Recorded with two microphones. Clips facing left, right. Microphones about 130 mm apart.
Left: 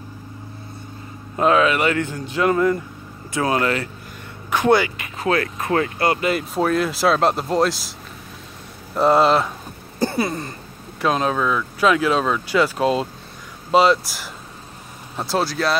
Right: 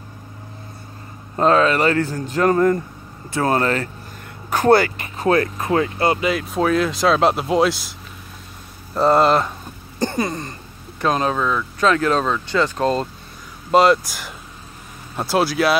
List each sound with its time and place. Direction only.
1.4 s a man's voice: 35° right (ahead or behind)
5.6 s speech: 20° right (ahead or behind)
6.3 s speech: centre (ahead or behind)
8.9 s speech: 5° left (ahead or behind)
9.9 s throat clearing: 5° left (ahead or behind)
11.0 s speech: centre (ahead or behind)